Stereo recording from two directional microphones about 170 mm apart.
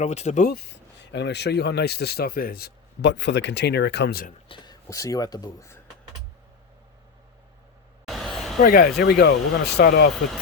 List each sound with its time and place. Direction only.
0.0 s speech: 40° left (ahead or behind)
0.7 s speech: 90° left
4.4 s speech: 25° left (ahead or behind)
8.0 s a sound: centre (ahead or behind)
8.6 s speech: 60° left (ahead or behind)